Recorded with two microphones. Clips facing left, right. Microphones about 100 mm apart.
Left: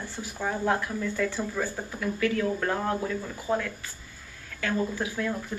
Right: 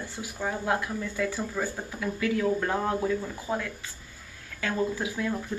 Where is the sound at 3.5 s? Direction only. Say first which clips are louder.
Left 4 dB; 15° right (ahead or behind).